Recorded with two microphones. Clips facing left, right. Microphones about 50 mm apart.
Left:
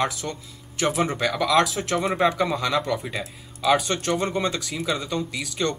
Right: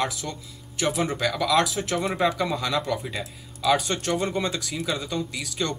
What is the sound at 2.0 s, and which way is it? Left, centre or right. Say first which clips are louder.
Speech: left 3 dB; centre.